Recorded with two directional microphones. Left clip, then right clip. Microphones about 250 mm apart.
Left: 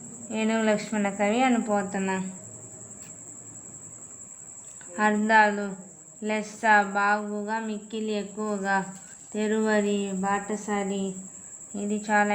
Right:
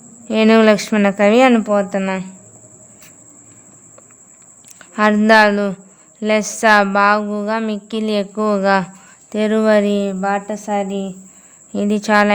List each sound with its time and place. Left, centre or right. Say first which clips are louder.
0.3 s a woman's voice: right 14 dB; right
4.8 s a woman's voice: right 10 dB; right